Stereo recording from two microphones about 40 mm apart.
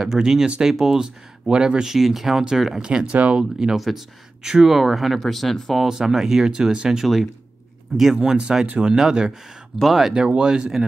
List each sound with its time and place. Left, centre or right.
0.0 s speech: centre
1.5 s speech: right
2.0 s speech: centre
2.8 s speech: centre
3.7 s speech: centre
5.9 s speech: centre
8.5 s speech: centre
9.8 s speech: centre
10.1 s speech: right